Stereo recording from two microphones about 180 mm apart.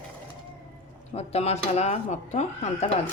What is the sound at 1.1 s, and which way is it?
Speech, 35° left (ahead or behind).